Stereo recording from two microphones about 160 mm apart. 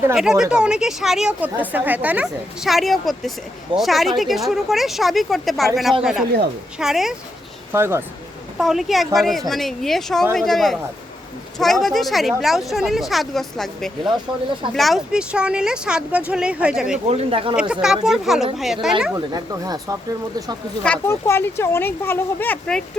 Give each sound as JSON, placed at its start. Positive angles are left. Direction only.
{"t": 0.2, "sound": "speech", "side_deg": -5}
{"t": 7.7, "sound": "speech", "side_deg": -15}
{"t": 8.5, "sound": "speech", "side_deg": 0}
{"t": 17.1, "sound": "speech", "side_deg": -40}
{"t": 17.6, "sound": "speech", "side_deg": -5}
{"t": 19.1, "sound": "speech", "side_deg": -25}
{"t": 20.8, "sound": "speech", "side_deg": 10}